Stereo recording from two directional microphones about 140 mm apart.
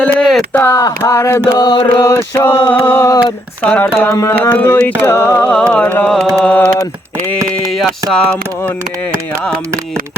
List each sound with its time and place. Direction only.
0.2 s a sound: 5° left (ahead or behind)
0.6 s speech: 20° left (ahead or behind)
1.5 s chant: 35° left (ahead or behind)
2.3 s speech: 15° left (ahead or behind)
8.1 s speech: 10° left (ahead or behind)